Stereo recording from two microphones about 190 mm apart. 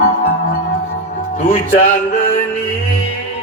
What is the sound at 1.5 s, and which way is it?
Speech, 40° left (ahead or behind).